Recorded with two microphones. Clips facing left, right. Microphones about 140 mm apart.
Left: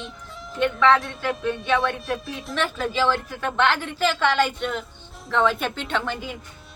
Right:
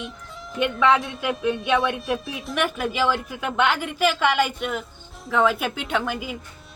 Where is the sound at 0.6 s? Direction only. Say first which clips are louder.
Left 1 dB; 5° right (ahead or behind).